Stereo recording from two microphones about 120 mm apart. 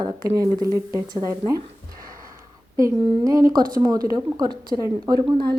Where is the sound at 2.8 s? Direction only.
25° right (ahead or behind).